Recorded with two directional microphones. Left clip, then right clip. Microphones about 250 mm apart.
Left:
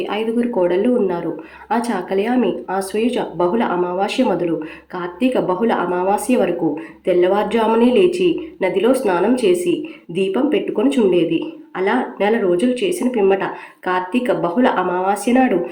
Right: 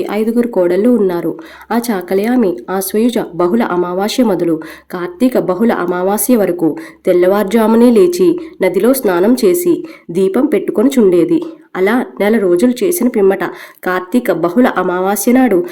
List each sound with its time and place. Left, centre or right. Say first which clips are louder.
0.0 s speech: right 5 dB; right